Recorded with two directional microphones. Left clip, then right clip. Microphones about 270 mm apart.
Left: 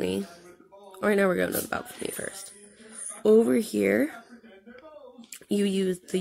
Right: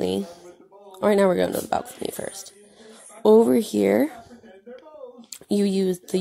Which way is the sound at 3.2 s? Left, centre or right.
Centre.